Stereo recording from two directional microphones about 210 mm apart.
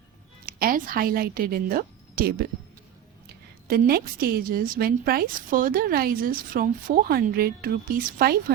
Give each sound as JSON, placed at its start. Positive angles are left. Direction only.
{"t": 0.4, "sound": "a woman's voice", "side_deg": -45}
{"t": 3.7, "sound": "a woman's voice", "side_deg": -45}